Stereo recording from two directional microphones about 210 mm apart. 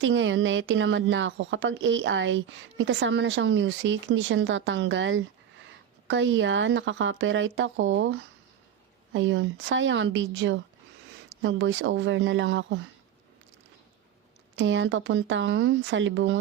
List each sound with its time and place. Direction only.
0.0 s speech: 65° right (ahead or behind)
14.5 s speech: 60° right (ahead or behind)